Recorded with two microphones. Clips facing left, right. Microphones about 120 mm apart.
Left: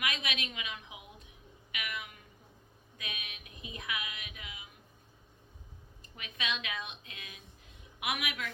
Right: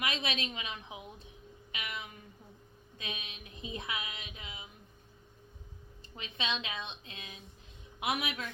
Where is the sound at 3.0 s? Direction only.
30° right (ahead or behind).